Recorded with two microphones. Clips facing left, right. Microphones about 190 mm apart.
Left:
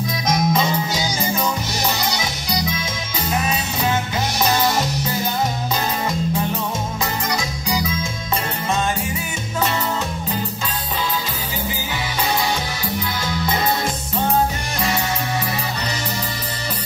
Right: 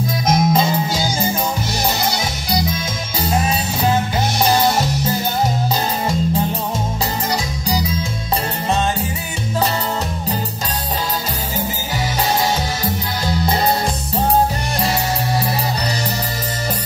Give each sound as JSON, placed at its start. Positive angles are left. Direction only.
{"t": 0.3, "sound": "music", "side_deg": -30}
{"t": 3.3, "sound": "music", "side_deg": -30}
{"t": 7.6, "sound": "music", "side_deg": -35}
{"t": 12.8, "sound": "music", "side_deg": -35}